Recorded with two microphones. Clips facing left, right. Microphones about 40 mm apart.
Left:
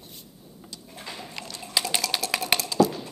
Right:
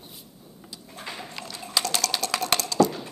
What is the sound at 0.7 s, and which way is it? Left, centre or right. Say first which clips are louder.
Sliding door: right 2 dB; centre.